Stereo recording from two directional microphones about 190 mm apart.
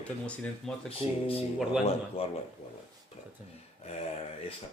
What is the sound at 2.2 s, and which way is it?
Speech, 30° left (ahead or behind).